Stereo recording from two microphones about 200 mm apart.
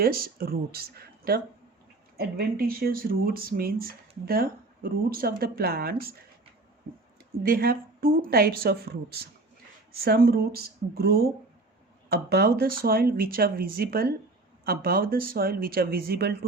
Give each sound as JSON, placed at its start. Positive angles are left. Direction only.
{"t": 0.0, "sound": "speech", "side_deg": -45}
{"t": 7.4, "sound": "speech", "side_deg": -50}